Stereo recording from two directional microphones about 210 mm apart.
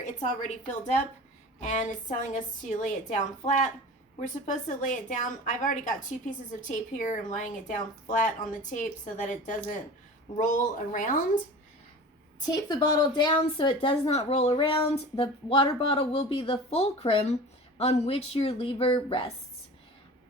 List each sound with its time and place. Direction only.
1.6 s a woman's voice: 35° left (ahead or behind)
12.5 s speech: 20° left (ahead or behind)